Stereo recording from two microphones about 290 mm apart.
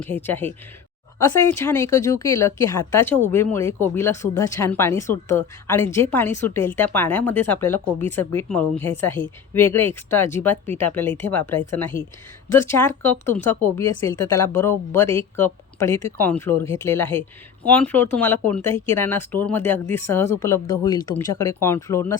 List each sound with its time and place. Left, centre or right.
0.0 s a woman's voice: centre